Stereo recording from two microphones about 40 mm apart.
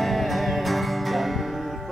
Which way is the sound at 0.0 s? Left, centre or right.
Centre.